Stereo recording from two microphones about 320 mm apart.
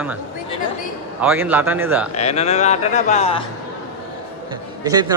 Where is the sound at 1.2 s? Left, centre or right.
Centre.